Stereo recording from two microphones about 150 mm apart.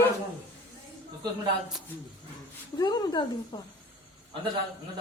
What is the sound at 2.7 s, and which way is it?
Speech, 25° left (ahead or behind).